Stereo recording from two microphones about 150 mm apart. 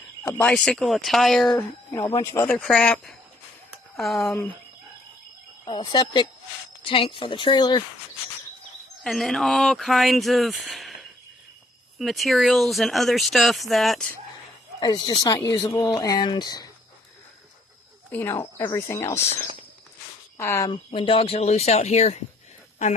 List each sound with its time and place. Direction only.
0.2 s speech: 10° left (ahead or behind)
1.6 s speech: 20° left (ahead or behind)
2.5 s speech: 5° left (ahead or behind)
5.7 s speech: 30° left (ahead or behind)
9.0 s speech: centre (ahead or behind)
14.8 s speech: 30° left (ahead or behind)
18.1 s speech: 15° left (ahead or behind)
20.3 s speech: 20° left (ahead or behind)
20.9 s speech: 35° left (ahead or behind)